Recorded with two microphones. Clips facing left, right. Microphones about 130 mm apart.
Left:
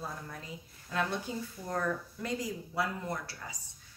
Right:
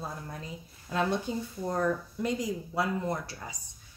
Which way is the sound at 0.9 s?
25° right (ahead or behind).